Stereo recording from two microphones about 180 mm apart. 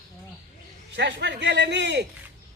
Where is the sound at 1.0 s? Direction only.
75° right (ahead or behind).